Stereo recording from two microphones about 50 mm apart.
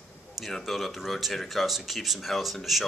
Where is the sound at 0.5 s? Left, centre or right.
Centre.